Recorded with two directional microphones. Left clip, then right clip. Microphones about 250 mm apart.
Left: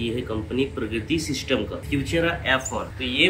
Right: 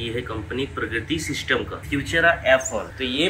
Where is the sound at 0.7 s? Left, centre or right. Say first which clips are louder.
Right 1 dB; right.